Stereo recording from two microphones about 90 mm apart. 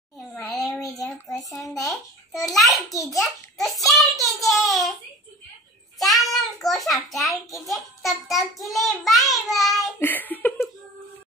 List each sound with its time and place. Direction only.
0.4 s a sound: centre (ahead or behind)
1.5 s a child's voice: centre (ahead or behind)
4.4 s child singing: centre (ahead or behind)
5.9 s a child's voice: centre (ahead or behind)
9.9 s laughter: 20° left (ahead or behind)